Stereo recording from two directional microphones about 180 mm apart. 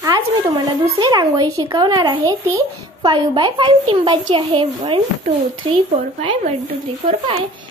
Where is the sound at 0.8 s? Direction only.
25° right (ahead or behind).